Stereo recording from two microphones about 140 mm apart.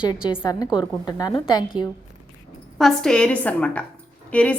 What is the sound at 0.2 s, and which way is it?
A woman's voice, 30° left (ahead or behind).